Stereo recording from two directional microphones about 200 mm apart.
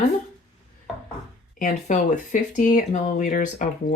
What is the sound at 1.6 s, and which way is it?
Speech, 40° left (ahead or behind).